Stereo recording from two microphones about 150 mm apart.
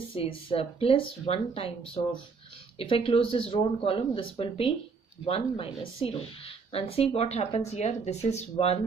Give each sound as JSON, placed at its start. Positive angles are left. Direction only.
{"t": 0.1, "sound": "speech", "side_deg": 35}
{"t": 2.8, "sound": "a woman's voice", "side_deg": 40}